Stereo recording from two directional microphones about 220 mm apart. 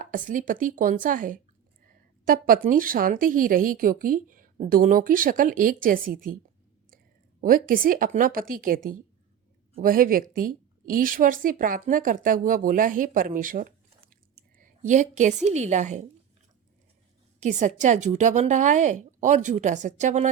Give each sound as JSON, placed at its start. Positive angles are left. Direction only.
{"t": 0.0, "sound": "a woman's voice", "side_deg": -35}
{"t": 7.7, "sound": "a woman's voice", "side_deg": -40}
{"t": 14.1, "sound": "a sound", "side_deg": -40}
{"t": 15.4, "sound": "a woman's voice", "side_deg": -30}
{"t": 17.4, "sound": "a woman's voice", "side_deg": -35}